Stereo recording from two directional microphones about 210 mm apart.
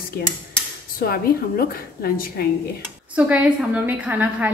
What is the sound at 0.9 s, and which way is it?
A woman's voice, 45° left (ahead or behind).